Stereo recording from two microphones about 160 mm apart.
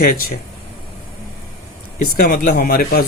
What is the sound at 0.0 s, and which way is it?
Speech, 65° left (ahead or behind).